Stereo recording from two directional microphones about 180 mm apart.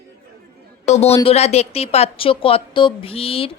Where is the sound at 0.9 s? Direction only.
35° left (ahead or behind).